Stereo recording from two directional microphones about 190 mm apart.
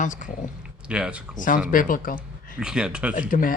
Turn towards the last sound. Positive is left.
turn(degrees=45)  # may be behind; listen again after turning